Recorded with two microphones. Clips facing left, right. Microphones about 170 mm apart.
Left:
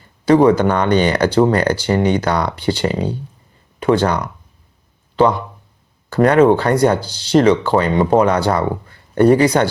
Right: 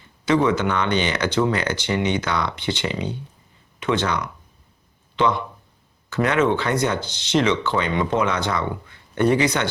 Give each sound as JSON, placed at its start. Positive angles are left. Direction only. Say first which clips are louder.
{"t": 0.4, "sound": "speech", "louder": "left 8 dB", "side_deg": 40}